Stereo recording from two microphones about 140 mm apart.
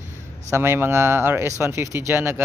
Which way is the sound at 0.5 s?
15° right (ahead or behind).